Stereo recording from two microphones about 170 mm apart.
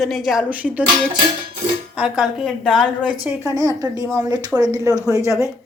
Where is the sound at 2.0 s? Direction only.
Centre (ahead or behind).